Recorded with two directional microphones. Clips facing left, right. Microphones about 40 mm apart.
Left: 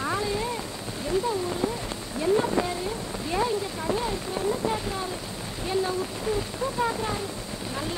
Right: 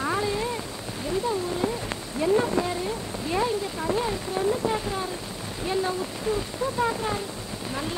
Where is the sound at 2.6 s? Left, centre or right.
Left.